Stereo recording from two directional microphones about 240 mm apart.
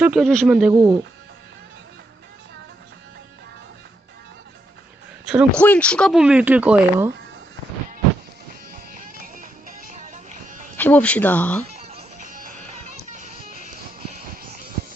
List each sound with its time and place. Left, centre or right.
0.0 s speech: centre
0.7 s speech: centre
5.2 s speech: centre
9.0 s music: right
10.8 s speech: centre
11.8 s music: right
13.7 s vehicle: right